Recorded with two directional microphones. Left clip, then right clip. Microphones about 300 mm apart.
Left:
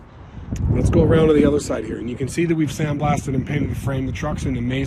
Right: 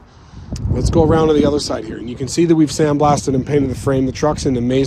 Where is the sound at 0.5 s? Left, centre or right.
Centre.